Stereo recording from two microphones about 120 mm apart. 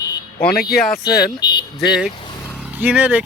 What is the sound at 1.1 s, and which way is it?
Speech, 35° left (ahead or behind).